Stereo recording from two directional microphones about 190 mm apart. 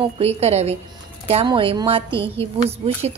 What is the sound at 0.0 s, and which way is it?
A woman's voice, 30° right (ahead or behind).